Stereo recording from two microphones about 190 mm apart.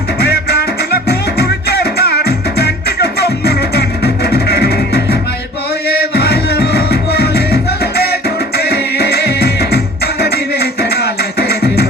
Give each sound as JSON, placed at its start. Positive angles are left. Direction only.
{"t": 0.2, "sound": "music", "side_deg": 55}